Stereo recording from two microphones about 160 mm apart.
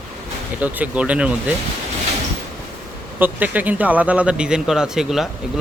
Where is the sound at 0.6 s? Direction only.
10° right (ahead or behind).